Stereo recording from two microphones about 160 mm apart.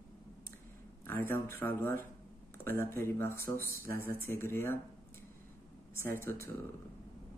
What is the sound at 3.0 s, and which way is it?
Speech, 15° left (ahead or behind).